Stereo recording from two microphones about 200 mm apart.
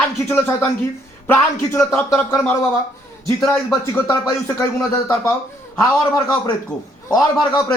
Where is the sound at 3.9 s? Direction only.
15° left (ahead or behind).